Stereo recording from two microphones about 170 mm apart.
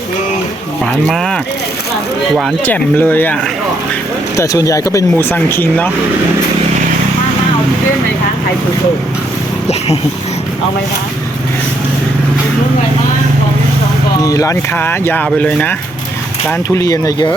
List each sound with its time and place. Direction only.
1.0 s speech: 5° left (ahead or behind)
2.6 s speech: 10° left (ahead or behind)
4.4 s speech: 20° left (ahead or behind)
14.2 s speech: 20° left (ahead or behind)
16.5 s speech: 20° left (ahead or behind)